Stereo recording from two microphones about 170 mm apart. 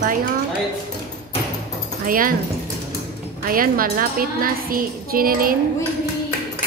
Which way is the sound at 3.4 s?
55° right (ahead or behind).